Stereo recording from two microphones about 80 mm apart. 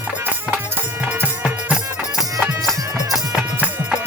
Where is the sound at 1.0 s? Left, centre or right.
Centre.